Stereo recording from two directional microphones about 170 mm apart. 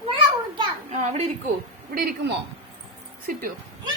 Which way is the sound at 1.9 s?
60° right (ahead or behind).